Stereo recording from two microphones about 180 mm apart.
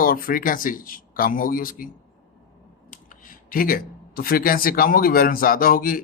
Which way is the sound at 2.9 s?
50° left (ahead or behind).